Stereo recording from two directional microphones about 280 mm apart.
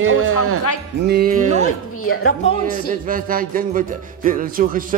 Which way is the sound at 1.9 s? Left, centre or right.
Left.